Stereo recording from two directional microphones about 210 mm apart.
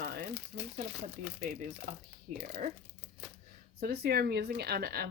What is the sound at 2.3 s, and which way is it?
Speech, 35° right (ahead or behind).